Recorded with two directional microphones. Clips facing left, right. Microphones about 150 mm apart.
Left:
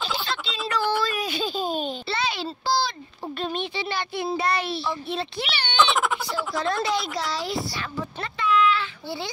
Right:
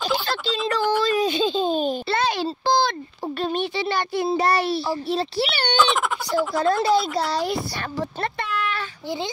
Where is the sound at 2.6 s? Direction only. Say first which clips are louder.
Right 4 dB; 50° right (ahead or behind).